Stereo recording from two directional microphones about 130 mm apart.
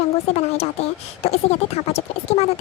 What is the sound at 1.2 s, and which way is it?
Speech, 55° left (ahead or behind).